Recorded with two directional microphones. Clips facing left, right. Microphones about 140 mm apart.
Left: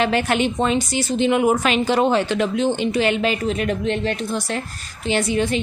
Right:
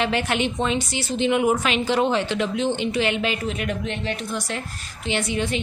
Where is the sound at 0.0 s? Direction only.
45° left (ahead or behind).